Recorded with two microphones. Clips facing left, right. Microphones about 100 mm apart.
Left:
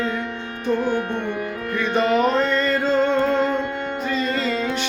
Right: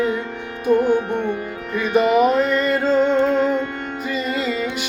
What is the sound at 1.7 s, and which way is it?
Music, 15° right (ahead or behind).